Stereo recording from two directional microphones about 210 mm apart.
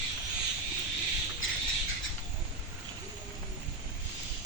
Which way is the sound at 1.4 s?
70° left (ahead or behind).